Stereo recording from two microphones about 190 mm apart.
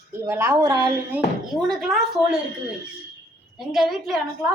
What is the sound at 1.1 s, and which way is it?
Speech, centre (ahead or behind).